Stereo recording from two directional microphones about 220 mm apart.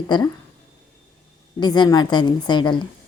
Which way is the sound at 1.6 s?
20° left (ahead or behind).